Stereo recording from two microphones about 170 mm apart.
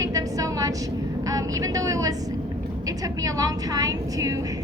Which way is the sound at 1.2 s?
20° right (ahead or behind).